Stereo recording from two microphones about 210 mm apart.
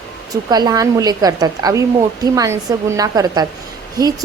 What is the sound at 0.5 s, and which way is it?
A woman's voice, 20° right (ahead or behind).